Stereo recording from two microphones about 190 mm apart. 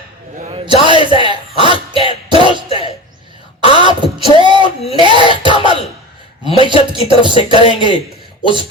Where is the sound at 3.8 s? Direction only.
25° right (ahead or behind).